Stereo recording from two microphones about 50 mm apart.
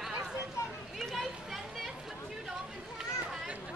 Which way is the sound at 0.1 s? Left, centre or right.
Centre.